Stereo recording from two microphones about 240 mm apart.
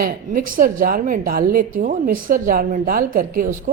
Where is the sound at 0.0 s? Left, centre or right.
Right.